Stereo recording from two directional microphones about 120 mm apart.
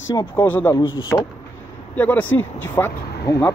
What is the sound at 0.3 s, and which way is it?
Speech, 15° left (ahead or behind).